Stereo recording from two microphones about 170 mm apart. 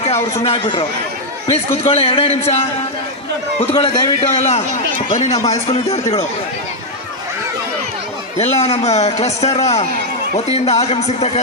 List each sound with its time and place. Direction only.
0.4 s a man's voice: 30° left (ahead or behind)
8.4 s a man's voice: 40° left (ahead or behind)